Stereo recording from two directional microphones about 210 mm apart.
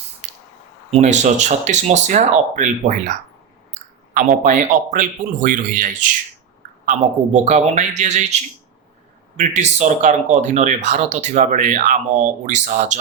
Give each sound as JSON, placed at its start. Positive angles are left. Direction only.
{"t": 0.9, "sound": "speech", "side_deg": -30}
{"t": 9.4, "sound": "speech", "side_deg": -35}